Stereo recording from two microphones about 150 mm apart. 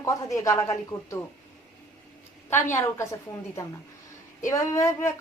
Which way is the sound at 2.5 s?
15° left (ahead or behind).